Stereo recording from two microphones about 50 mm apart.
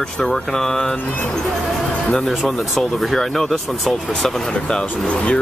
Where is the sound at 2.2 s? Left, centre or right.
Centre.